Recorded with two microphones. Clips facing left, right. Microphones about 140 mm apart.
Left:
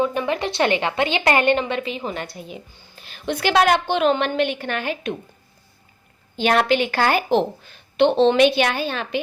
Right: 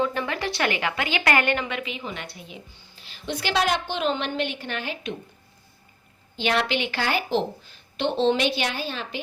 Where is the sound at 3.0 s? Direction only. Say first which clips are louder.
Left 7 dB; 55° left (ahead or behind).